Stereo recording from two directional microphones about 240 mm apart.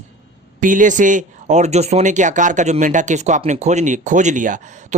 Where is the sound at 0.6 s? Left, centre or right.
Right.